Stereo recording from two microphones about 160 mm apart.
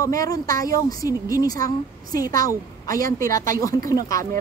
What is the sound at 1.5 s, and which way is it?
A woman's voice, 20° left (ahead or behind).